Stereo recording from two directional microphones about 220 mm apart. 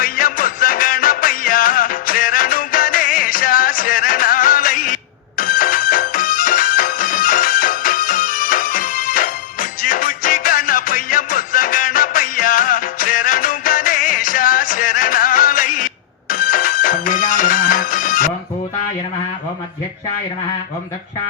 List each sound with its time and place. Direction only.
0.0 s music: 40° left (ahead or behind)